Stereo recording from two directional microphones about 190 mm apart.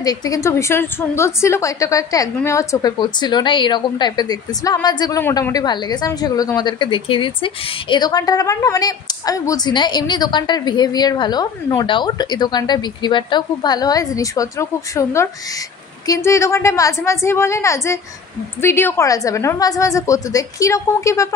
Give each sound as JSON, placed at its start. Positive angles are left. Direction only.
{"t": 0.0, "sound": "a woman's voice", "side_deg": 20}